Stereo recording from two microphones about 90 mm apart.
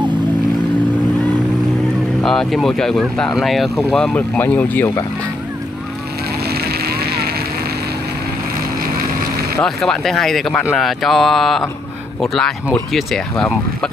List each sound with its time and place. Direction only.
2.2 s speech: 5° left (ahead or behind)
4.1 s speech: 20° left (ahead or behind)
9.6 s speech: 5° left (ahead or behind)